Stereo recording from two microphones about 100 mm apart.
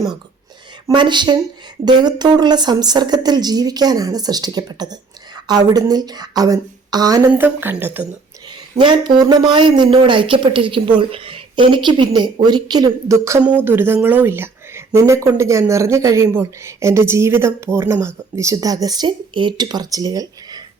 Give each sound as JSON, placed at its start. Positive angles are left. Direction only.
{"t": 0.9, "sound": "speech", "side_deg": -50}
{"t": 7.3, "sound": "speech", "side_deg": -20}
{"t": 8.8, "sound": "speech", "side_deg": -50}
{"t": 13.1, "sound": "speech", "side_deg": -30}
{"t": 13.4, "sound": "speech", "side_deg": -15}